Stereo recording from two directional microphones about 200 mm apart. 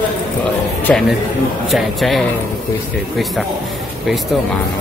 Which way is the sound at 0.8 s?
Centre (ahead or behind).